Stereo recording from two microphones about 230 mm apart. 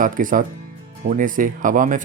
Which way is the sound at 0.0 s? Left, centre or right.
Right.